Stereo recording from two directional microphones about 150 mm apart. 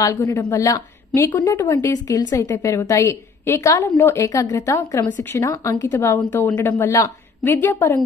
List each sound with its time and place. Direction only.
0.0 s a woman's voice: 25° left (ahead or behind)
4.7 s a woman's voice: 10° left (ahead or behind)